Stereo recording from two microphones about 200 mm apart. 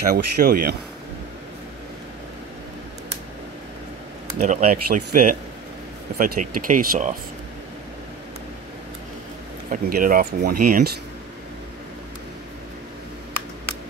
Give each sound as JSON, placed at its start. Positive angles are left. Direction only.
{"t": 0.1, "sound": "speech", "side_deg": -45}
{"t": 4.4, "sound": "speech", "side_deg": -40}
{"t": 9.7, "sound": "speech", "side_deg": -45}